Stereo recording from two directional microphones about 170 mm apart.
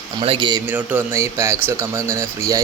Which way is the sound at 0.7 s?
10° right (ahead or behind).